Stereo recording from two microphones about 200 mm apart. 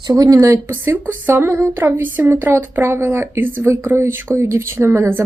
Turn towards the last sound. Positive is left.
turn(degrees=-10)  # may be behind; listen again after turning